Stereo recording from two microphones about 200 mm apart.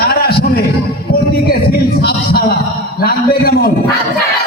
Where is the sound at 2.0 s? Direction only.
50° left (ahead or behind).